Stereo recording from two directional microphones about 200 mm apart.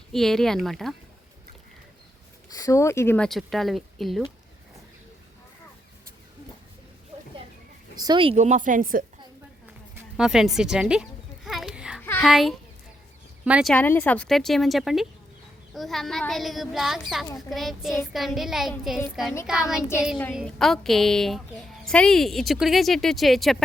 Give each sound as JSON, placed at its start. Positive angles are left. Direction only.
{"t": 0.1, "sound": "a woman's voice", "side_deg": 0}
{"t": 2.6, "sound": "speech", "side_deg": 15}
{"t": 3.2, "sound": "a woman's voice", "side_deg": 0}
{"t": 7.9, "sound": "speech", "side_deg": -20}
{"t": 10.2, "sound": "a woman's voice", "side_deg": 0}
{"t": 11.4, "sound": "a sound", "side_deg": -5}
{"t": 12.2, "sound": "a woman's voice", "side_deg": 0}
{"t": 13.7, "sound": "a woman's voice", "side_deg": 10}